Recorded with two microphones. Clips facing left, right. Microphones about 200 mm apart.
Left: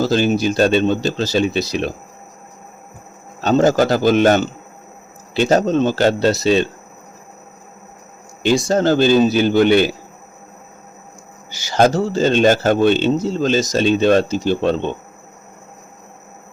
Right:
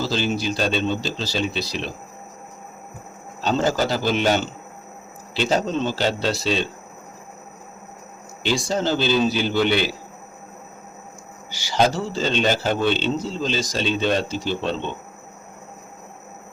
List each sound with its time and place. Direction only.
0.0 s speech: 50° left (ahead or behind)
3.4 s speech: 45° left (ahead or behind)
8.4 s speech: 45° left (ahead or behind)
11.8 s speech: 45° left (ahead or behind)